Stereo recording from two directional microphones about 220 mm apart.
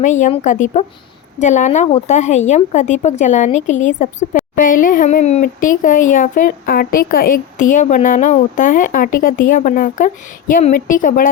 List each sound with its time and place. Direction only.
0.0 s a woman's voice: 35° left (ahead or behind)